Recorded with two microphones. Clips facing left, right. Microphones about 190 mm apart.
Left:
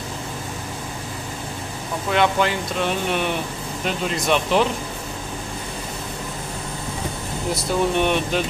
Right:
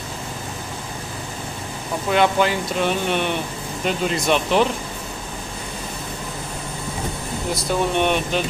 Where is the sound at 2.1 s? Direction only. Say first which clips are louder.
Right 2 dB; centre (ahead or behind).